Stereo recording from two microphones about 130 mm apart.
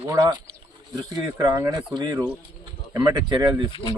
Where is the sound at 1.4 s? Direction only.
20° right (ahead or behind).